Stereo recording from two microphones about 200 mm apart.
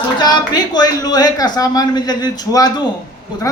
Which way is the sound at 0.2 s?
20° left (ahead or behind).